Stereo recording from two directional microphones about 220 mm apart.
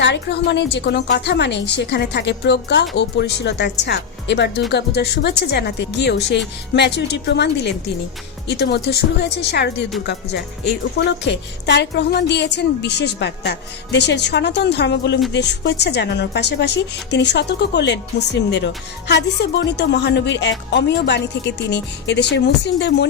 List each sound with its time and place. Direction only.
0.0 s a woman's voice: 50° left (ahead or behind)